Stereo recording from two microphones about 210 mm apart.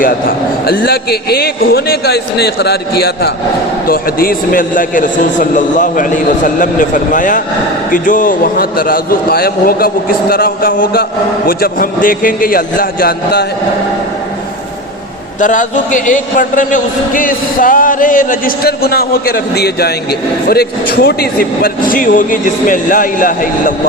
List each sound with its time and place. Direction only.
0.0 s a man's voice: 45° left (ahead or behind)
15.4 s a man's voice: 35° left (ahead or behind)